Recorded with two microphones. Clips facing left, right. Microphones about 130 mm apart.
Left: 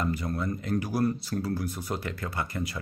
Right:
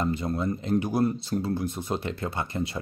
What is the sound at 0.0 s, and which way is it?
Speech, 25° right (ahead or behind).